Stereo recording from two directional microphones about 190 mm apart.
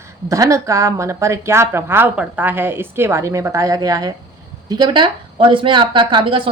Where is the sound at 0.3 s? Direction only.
15° right (ahead or behind).